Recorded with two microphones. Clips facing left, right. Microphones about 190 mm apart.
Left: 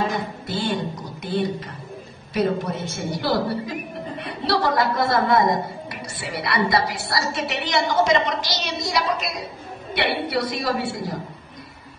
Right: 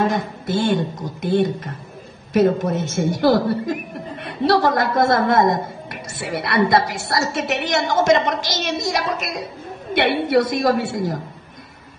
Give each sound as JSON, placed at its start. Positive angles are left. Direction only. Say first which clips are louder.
{"t": 0.0, "sound": "a woman's voice", "louder": "right 4 dB", "side_deg": -50}